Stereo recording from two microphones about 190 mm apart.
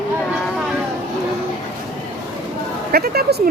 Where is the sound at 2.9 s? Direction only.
55° right (ahead or behind).